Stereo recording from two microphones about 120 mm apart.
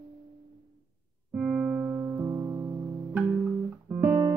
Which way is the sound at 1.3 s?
15° right (ahead or behind).